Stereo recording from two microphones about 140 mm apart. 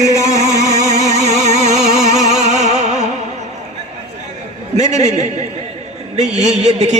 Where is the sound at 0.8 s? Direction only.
55° right (ahead or behind).